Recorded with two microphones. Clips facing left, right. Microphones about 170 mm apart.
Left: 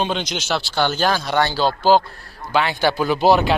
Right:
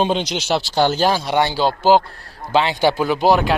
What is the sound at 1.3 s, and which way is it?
A man's voice, 15° right (ahead or behind).